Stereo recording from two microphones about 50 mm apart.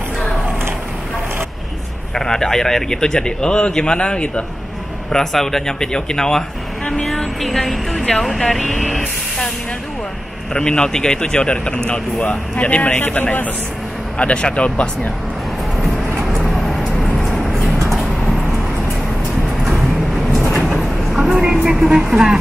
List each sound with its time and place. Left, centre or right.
2.1 s speech: centre
5.1 s speech: centre
6.9 s a sound: centre
7.4 s speech: centre
10.5 s a man's voice: centre
16.3 s vehicle: centre
20.6 s vehicle: centre